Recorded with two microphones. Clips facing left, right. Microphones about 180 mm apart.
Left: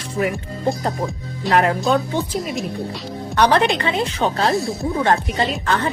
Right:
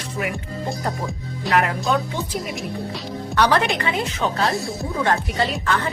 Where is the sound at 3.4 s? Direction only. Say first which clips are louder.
Left 3 dB; 25° left (ahead or behind).